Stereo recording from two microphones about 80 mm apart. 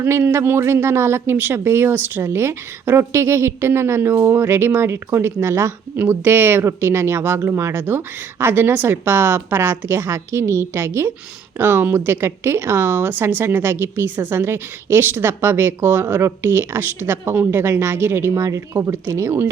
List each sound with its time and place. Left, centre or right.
0.0 s speech: right